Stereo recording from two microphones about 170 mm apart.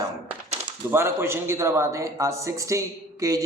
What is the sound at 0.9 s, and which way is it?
A man's voice, 15° right (ahead or behind).